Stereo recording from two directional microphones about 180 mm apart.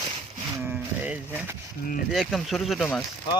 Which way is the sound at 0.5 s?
10° right (ahead or behind).